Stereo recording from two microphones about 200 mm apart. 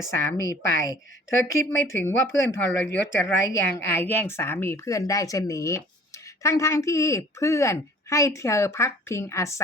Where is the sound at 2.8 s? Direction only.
65° left (ahead or behind).